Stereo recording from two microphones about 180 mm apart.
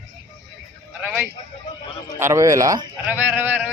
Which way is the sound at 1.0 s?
5° right (ahead or behind).